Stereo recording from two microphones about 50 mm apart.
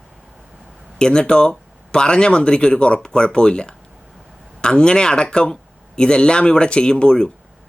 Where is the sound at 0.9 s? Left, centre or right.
Centre.